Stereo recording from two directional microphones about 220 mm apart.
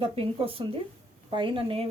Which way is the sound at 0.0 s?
25° right (ahead or behind).